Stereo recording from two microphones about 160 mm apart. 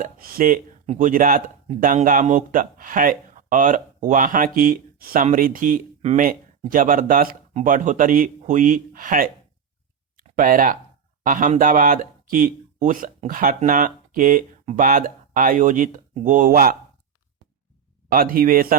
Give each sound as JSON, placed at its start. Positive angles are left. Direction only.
{"t": 0.0, "sound": "speech", "side_deg": -65}
{"t": 6.0, "sound": "speech", "side_deg": -45}
{"t": 6.2, "sound": "speech", "side_deg": -55}
{"t": 10.3, "sound": "speech", "side_deg": -60}
{"t": 18.1, "sound": "speech", "side_deg": -65}